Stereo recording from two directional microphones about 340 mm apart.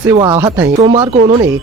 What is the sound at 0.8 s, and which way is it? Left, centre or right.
Speech, centre.